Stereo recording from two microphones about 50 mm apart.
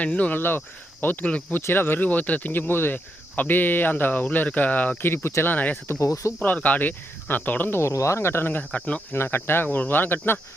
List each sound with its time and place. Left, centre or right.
0.0 s speech: left
0.3 s speech: left
2.5 s speech: left
3.3 s speech: left
5.1 s speech: left
5.5 s speech: left
5.9 s cricket: left
6.4 s speech: left
7.8 s speech: left
9.7 s speech: left